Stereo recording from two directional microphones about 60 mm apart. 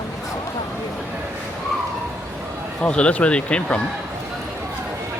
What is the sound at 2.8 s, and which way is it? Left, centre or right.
Speech, centre.